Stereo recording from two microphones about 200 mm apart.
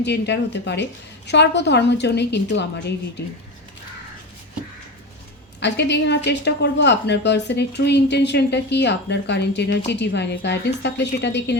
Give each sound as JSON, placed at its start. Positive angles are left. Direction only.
{"t": 0.0, "sound": "a woman's voice", "side_deg": 60}
{"t": 5.5, "sound": "a woman's voice", "side_deg": 60}